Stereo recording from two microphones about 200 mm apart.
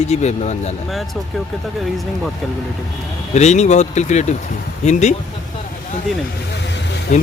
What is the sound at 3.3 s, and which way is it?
Speech, 35° left (ahead or behind).